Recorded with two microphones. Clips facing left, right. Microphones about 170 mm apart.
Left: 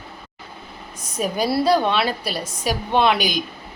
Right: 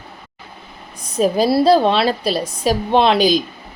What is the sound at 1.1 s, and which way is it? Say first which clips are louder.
A woman's voice: right 6 dB; 30° right (ahead or behind).